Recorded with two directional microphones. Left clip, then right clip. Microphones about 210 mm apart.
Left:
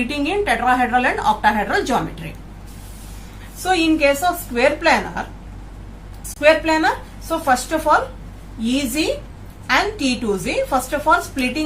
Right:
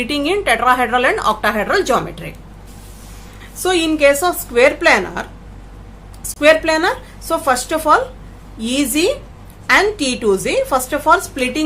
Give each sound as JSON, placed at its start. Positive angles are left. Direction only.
{"t": 0.1, "sound": "a woman's voice", "side_deg": -45}
{"t": 3.6, "sound": "a woman's voice", "side_deg": -50}
{"t": 6.4, "sound": "a woman's voice", "side_deg": -50}